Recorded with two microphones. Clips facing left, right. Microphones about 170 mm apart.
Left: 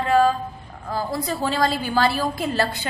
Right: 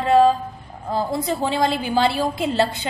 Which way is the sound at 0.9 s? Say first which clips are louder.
Right 3 dB; 25° right (ahead or behind).